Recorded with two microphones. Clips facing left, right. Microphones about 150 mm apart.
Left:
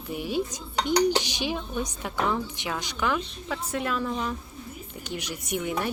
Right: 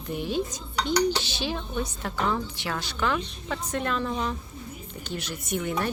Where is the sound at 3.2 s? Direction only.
5° left (ahead or behind).